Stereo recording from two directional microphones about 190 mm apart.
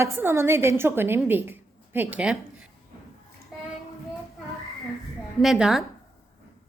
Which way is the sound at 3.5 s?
Centre (ahead or behind).